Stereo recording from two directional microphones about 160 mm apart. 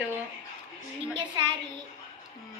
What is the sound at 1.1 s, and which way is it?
Speech, 25° right (ahead or behind).